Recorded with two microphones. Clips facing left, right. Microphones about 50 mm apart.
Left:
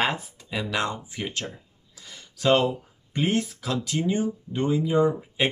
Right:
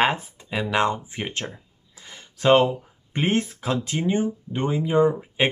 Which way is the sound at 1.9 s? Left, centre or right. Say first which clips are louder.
Right 2 dB; right.